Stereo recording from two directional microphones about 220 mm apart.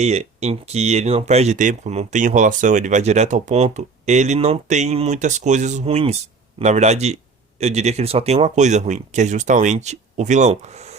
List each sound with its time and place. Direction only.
0.0 s speech: 30° right (ahead or behind)